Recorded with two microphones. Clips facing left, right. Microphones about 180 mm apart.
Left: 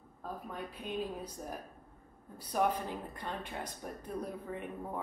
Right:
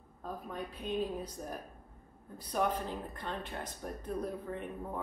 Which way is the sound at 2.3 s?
10° left (ahead or behind).